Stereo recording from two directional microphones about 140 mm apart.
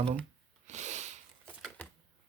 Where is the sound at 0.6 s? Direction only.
55° right (ahead or behind).